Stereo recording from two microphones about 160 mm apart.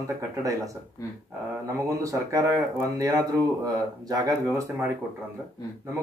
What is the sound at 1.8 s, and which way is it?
Speech, 20° right (ahead or behind).